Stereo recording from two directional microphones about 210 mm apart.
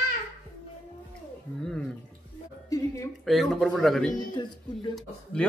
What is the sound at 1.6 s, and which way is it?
Speech, centre (ahead or behind).